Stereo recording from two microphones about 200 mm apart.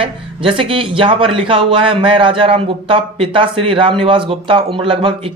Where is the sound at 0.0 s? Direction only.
25° right (ahead or behind).